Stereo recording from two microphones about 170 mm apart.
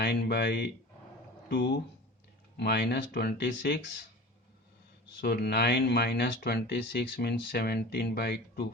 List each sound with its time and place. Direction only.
0.0 s speech: 75° left (ahead or behind)
5.2 s speech: 70° left (ahead or behind)